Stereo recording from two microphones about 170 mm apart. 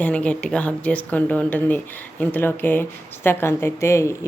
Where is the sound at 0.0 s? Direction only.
5° left (ahead or behind).